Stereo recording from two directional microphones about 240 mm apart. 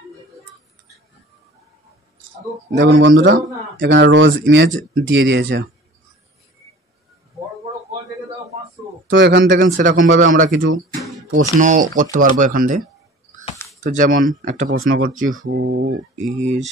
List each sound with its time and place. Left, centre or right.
2.7 s speech: right
9.1 s speech: right
9.6 s speech: right
11.0 s music: centre
11.6 s speech: right
13.8 s speech: right